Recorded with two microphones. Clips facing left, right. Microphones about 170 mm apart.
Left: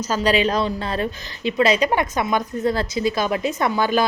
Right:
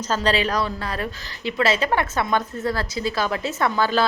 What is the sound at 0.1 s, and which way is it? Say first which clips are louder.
A woman's voice: left 2 dB; 15° left (ahead or behind).